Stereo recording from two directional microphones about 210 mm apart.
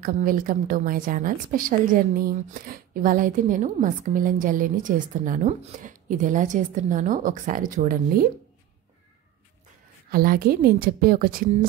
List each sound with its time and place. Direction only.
0.0 s a woman's voice: 40° right (ahead or behind)
10.1 s a woman's voice: 45° right (ahead or behind)